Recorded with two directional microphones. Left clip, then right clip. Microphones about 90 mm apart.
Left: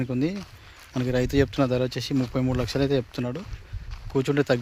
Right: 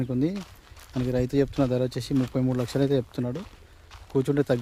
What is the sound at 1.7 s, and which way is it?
Speech, 30° right (ahead or behind).